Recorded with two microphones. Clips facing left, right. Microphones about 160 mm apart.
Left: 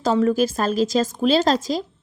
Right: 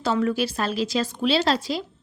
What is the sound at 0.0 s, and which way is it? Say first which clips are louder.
A woman's voice: left 5 dB; 40° left (ahead or behind).